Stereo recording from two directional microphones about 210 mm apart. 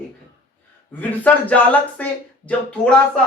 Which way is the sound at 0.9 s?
10° left (ahead or behind).